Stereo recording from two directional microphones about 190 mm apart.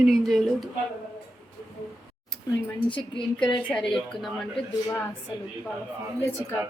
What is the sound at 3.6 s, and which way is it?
Speech, 5° left (ahead or behind).